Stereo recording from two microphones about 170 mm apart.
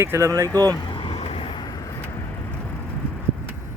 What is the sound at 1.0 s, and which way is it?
Vehicle, 35° left (ahead or behind).